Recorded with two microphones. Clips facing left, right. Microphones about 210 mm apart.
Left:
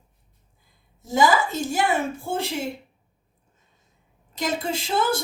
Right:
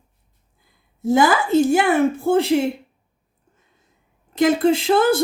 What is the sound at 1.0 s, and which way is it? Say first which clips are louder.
A woman's voice: right 4 dB; 60° right (ahead or behind).